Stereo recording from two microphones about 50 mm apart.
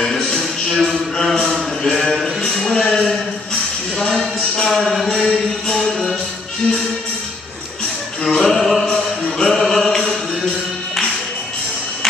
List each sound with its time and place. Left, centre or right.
0.0 s music: centre
0.4 s a sound: centre
2.4 s music: centre
4.0 s a sound: centre
8.2 s music: centre
8.8 s chant: centre